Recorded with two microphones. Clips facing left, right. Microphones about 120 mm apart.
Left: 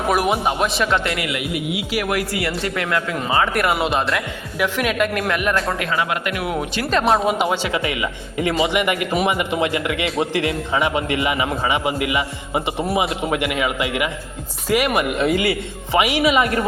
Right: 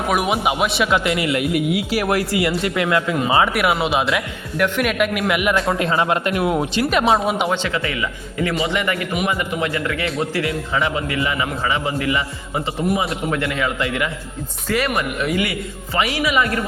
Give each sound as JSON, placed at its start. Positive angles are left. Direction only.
{"t": 0.1, "sound": "speech", "side_deg": 0}
{"t": 1.1, "sound": "speech", "side_deg": -25}
{"t": 1.4, "sound": "speech", "side_deg": -45}
{"t": 2.4, "sound": "speech", "side_deg": -20}
{"t": 5.8, "sound": "speech", "side_deg": -30}
{"t": 6.9, "sound": "a man's voice", "side_deg": 0}
{"t": 15.2, "sound": "a man's voice", "side_deg": 30}
{"t": 15.9, "sound": "a man's voice", "side_deg": 15}